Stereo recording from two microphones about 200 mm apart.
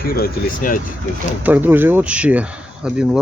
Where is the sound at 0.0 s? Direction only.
45° left (ahead or behind).